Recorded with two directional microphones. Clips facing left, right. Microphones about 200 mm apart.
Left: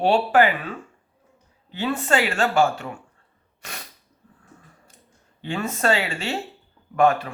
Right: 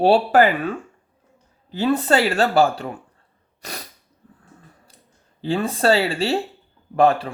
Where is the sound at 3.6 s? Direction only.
35° right (ahead or behind).